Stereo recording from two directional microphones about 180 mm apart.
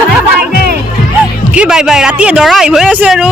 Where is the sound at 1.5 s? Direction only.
5° right (ahead or behind).